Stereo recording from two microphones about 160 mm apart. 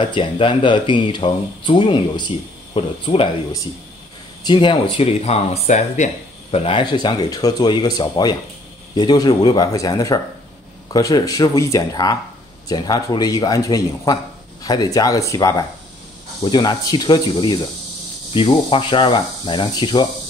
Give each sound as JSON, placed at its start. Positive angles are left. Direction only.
{"t": 0.0, "sound": "speech", "side_deg": 30}
{"t": 4.4, "sound": "speech", "side_deg": 30}
{"t": 6.5, "sound": "speech", "side_deg": 35}